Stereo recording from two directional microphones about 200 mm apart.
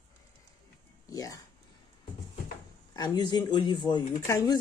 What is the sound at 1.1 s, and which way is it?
Speech, 20° left (ahead or behind).